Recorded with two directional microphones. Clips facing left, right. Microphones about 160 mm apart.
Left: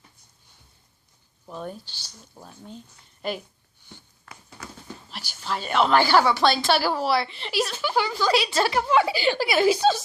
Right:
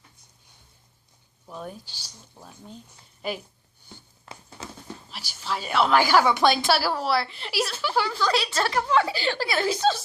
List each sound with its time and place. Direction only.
1.5 s a woman's voice: centre (ahead or behind)
2.3 s a woman's voice: 5° left (ahead or behind)
4.3 s a sound: 30° right (ahead or behind)
5.4 s a woman's voice: 5° right (ahead or behind)
6.7 s a woman's voice: centre (ahead or behind)
8.5 s a woman's voice: 15° left (ahead or behind)